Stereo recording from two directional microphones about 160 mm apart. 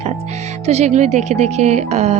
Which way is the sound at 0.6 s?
40° right (ahead or behind).